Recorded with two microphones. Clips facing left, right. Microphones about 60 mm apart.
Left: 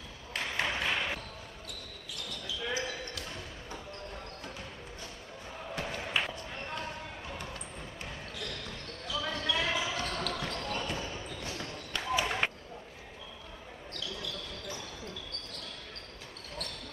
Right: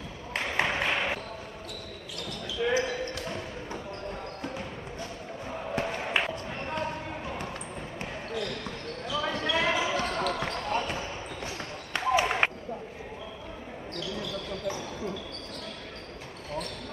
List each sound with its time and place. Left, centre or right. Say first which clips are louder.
0.3 s a sound: right 5 dB; right
2.6 s basketball bounce: right 9 dB; right
5.8 s basketball bounce: right 5 dB; right
9.0 s basketball bounce: right 4 dB; right